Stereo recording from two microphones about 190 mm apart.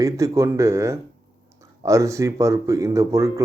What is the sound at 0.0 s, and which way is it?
A man's voice, 15° right (ahead or behind).